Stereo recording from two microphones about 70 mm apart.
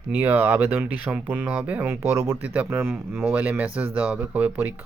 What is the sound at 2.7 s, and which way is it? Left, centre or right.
Speech, right.